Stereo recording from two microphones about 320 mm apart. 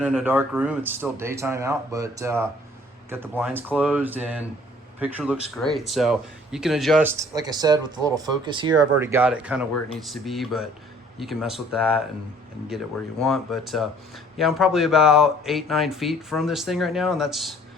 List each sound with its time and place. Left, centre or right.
0.0 s speech: centre